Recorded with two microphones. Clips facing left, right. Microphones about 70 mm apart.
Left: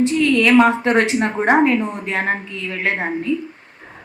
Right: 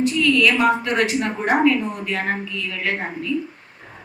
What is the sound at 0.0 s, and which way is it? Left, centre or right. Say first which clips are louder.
A woman's voice: left 2 dB; left.